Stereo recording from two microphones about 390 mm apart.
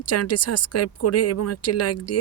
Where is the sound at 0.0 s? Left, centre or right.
Left.